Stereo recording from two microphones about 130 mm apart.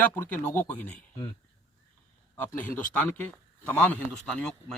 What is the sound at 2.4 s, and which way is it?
A man's voice, 15° left (ahead or behind).